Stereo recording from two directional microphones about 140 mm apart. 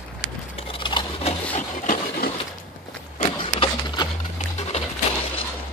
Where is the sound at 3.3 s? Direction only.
35° left (ahead or behind).